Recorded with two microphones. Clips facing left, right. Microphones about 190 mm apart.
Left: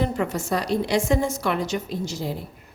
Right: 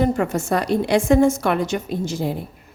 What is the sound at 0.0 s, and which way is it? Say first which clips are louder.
A woman's voice: right 5 dB; 50° right (ahead or behind).